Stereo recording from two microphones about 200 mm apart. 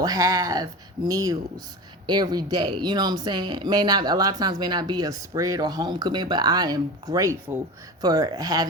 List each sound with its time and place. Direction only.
0.0 s speech: 20° right (ahead or behind)